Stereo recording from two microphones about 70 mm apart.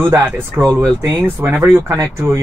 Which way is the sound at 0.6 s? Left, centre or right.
Right.